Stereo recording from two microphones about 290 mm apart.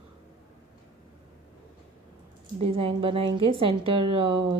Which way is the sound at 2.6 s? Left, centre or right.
Centre.